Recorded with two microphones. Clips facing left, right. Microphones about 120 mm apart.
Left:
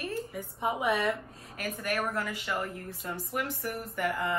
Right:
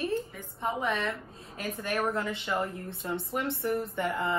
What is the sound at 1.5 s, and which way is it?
A woman's voice, 25° right (ahead or behind).